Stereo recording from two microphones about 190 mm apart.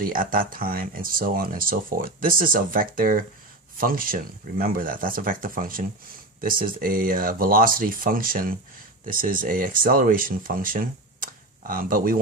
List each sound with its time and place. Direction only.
0.0 s speech: 45° right (ahead or behind)